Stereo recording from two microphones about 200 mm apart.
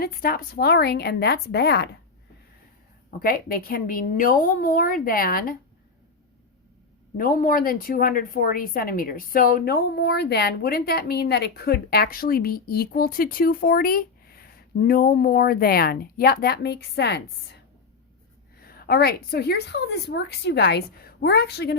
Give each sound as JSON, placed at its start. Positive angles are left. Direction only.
{"t": 0.0, "sound": "speech", "side_deg": 50}
{"t": 3.1, "sound": "speech", "side_deg": 45}
{"t": 7.2, "sound": "speech", "side_deg": 45}
{"t": 18.6, "sound": "a woman's voice", "side_deg": 50}